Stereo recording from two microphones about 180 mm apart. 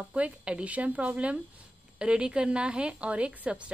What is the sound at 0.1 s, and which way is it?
Speech, 5° right (ahead or behind).